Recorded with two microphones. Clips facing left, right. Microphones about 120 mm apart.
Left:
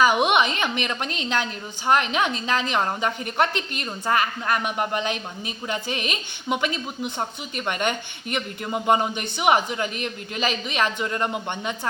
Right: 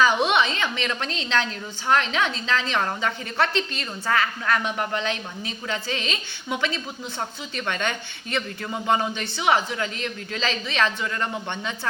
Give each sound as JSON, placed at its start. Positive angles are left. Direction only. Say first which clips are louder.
{"t": 0.0, "sound": "a woman's voice", "louder": "left 1 dB", "side_deg": 15}